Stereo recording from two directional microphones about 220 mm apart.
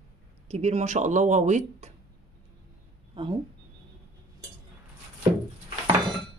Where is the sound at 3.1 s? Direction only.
25° right (ahead or behind).